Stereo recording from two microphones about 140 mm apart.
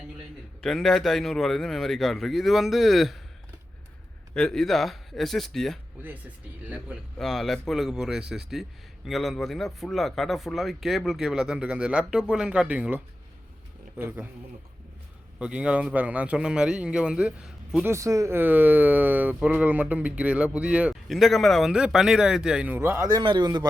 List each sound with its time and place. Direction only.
0.6 s speech: centre (ahead or behind)
4.4 s speech: 5° left (ahead or behind)
6.7 s speech: 10° right (ahead or behind)
7.2 s speech: centre (ahead or behind)
15.4 s speech: 10° right (ahead or behind)
17.8 s a man's voice: 20° right (ahead or behind)